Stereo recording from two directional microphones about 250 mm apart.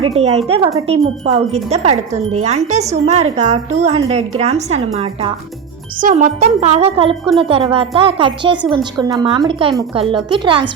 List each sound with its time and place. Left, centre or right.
0.0 s speech: right